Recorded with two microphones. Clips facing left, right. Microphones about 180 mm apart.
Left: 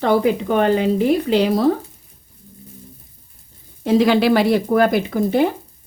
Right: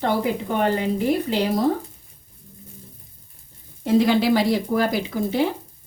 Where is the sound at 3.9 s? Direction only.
90° left; by 5.5 s 55° left (ahead or behind).